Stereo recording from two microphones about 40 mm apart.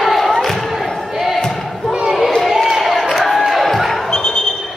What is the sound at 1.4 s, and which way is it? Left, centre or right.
Basketball bounce, centre.